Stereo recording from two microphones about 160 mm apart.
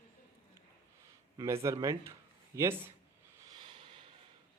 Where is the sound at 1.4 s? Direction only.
20° right (ahead or behind).